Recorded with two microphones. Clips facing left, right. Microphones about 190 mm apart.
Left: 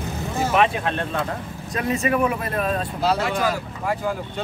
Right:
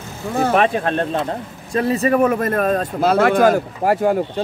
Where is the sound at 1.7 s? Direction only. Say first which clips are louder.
Right 5 dB; 35° right (ahead or behind); by 4.2 s 65° right (ahead or behind).